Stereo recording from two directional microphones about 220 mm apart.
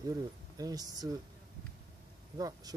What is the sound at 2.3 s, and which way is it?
Speech, 15° right (ahead or behind).